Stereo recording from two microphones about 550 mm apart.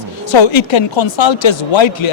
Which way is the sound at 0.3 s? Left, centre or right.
Left.